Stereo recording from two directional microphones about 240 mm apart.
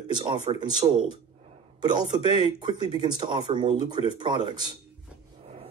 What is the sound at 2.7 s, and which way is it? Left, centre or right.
Speech, centre.